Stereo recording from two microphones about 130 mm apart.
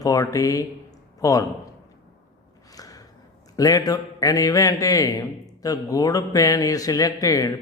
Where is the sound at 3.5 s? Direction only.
25° left (ahead or behind).